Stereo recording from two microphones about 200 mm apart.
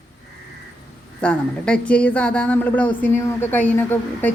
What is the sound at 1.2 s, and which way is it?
Speech, 5° left (ahead or behind).